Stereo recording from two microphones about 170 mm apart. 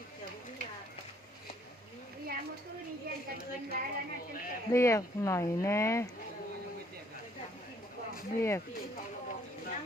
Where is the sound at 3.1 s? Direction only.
65° right (ahead or behind).